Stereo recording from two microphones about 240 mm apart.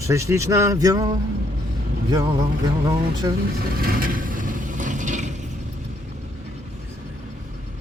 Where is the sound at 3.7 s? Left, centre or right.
Right.